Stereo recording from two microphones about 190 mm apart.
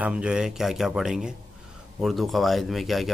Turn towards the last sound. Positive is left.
turn(degrees=0)  # may be behind; listen again after turning